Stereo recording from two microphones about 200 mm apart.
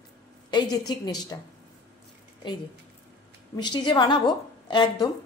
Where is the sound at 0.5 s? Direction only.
20° left (ahead or behind).